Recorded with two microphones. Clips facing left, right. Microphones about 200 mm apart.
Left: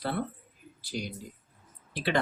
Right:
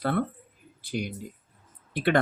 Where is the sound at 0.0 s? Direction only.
55° right (ahead or behind).